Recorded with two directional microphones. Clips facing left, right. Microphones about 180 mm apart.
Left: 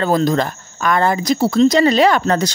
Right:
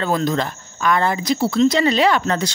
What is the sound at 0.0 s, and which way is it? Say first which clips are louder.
Speech: left 4 dB; 40° left (ahead or behind).